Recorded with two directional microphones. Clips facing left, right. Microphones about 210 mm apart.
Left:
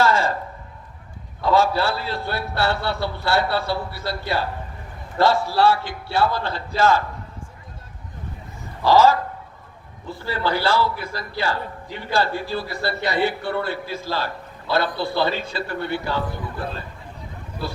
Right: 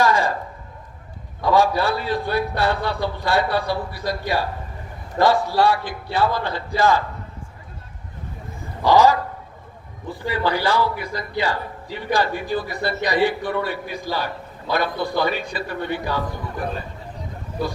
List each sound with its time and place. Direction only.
0.0 s a sound: 15° right (ahead or behind)
1.4 s a man's voice: 15° right (ahead or behind)
8.8 s a man's voice: 15° right (ahead or behind)